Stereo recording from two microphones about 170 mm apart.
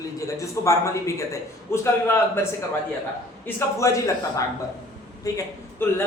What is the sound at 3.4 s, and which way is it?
Speech, 15° left (ahead or behind).